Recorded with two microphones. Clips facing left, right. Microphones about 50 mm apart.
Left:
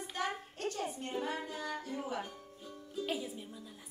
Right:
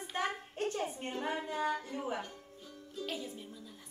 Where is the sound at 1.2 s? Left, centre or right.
Right.